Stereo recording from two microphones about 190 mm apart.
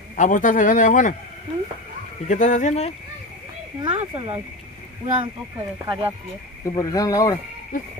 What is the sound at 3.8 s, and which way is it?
Speech, 30° right (ahead or behind).